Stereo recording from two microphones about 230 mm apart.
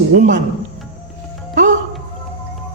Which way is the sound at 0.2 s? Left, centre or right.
Right.